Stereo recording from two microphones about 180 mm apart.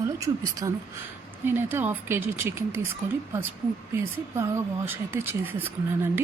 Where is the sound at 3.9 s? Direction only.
15° right (ahead or behind).